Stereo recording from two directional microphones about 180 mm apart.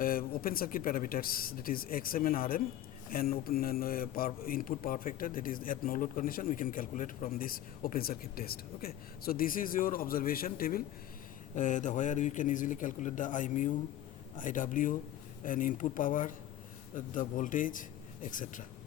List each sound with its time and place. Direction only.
0.0 s a man's voice: 55° left (ahead or behind)